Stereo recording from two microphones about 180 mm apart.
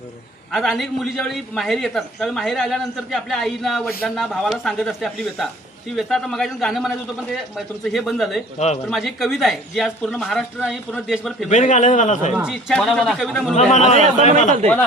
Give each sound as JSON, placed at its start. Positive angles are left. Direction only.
{"t": 0.5, "sound": "a man's voice", "side_deg": 0}
{"t": 7.9, "sound": "a man's voice", "side_deg": 0}
{"t": 8.5, "sound": "a man's voice", "side_deg": 40}
{"t": 8.9, "sound": "a man's voice", "side_deg": 0}
{"t": 11.4, "sound": "a man's voice", "side_deg": 40}
{"t": 12.4, "sound": "a man's voice", "side_deg": -5}
{"t": 13.6, "sound": "a man's voice", "side_deg": 40}